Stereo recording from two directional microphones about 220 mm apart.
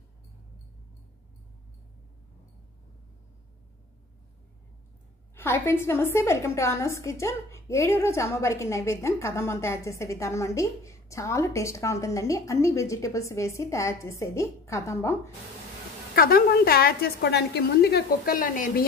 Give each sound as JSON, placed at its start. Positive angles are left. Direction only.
{"t": 5.3, "sound": "a woman's voice", "side_deg": 10}
{"t": 16.2, "sound": "a woman's voice", "side_deg": 40}